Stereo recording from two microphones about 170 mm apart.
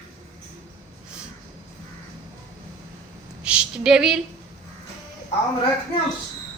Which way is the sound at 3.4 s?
5° right (ahead or behind).